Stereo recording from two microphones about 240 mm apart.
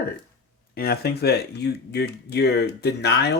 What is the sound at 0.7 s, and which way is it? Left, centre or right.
Speech, left.